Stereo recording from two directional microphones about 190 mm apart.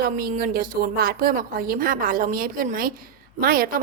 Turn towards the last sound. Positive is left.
turn(degrees=-50)  # may be behind; listen again after turning